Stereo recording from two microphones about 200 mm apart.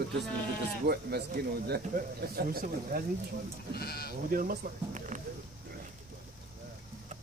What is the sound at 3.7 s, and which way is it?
Speech, 50° left (ahead or behind).